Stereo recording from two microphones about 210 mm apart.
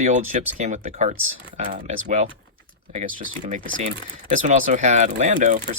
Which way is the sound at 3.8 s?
35° right (ahead or behind).